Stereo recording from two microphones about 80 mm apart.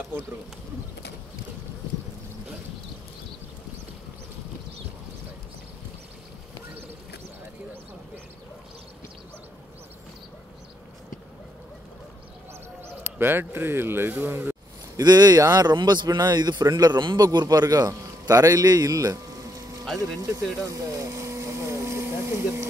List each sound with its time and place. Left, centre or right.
12.8 s speech: right
15.0 s speech: right
17.2 s a man's voice: right
20.5 s a sound: right